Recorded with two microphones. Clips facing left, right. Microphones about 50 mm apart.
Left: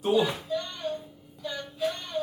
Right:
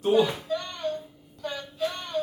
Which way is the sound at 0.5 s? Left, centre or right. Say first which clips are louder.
Right 1 dB; right.